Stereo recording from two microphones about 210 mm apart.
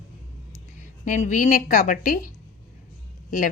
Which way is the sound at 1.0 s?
40° left (ahead or behind).